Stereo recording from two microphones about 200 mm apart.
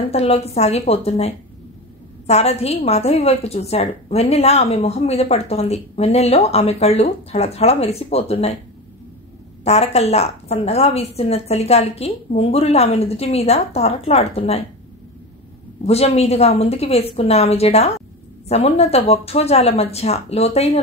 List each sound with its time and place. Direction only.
0.1 s a woman's voice: 30° left (ahead or behind)
9.7 s a woman's voice: 30° left (ahead or behind)
15.8 s a woman's voice: 30° left (ahead or behind)